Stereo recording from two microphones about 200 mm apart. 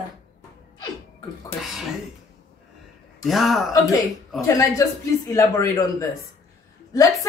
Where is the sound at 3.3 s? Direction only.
Centre (ahead or behind).